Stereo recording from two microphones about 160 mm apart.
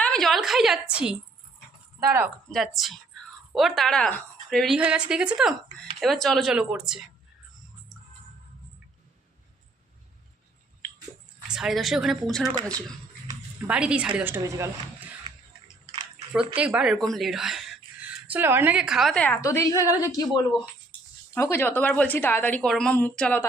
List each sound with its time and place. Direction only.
0.0 s a woman's voice: 5° left (ahead or behind)
2.0 s a woman's voice: 15° right (ahead or behind)
2.5 s a woman's voice: centre (ahead or behind)
11.4 s a woman's voice: 5° right (ahead or behind)
13.7 s a woman's voice: 5° right (ahead or behind)
15.2 s a sound: 35° right (ahead or behind)
16.6 s speech: 5° right (ahead or behind)
18.3 s a woman's voice: 15° right (ahead or behind); by 19.4 s 10° left (ahead or behind)
19.4 s a woman's voice: 20° left (ahead or behind)